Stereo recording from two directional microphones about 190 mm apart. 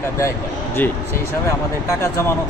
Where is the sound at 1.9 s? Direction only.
15° left (ahead or behind).